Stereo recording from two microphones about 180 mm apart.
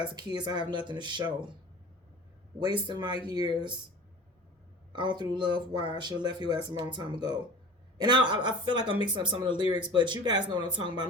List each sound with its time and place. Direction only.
0.0 s speech: 25° right (ahead or behind)
2.6 s speech: 25° right (ahead or behind)
4.9 s speech: 25° right (ahead or behind)